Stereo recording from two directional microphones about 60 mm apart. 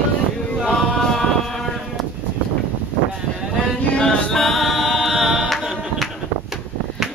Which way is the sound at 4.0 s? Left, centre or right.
Centre.